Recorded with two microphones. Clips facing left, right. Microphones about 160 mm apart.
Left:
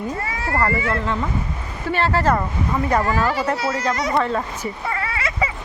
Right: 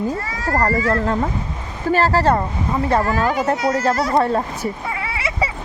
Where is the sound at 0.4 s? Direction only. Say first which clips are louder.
Right 3 dB; 40° right (ahead or behind).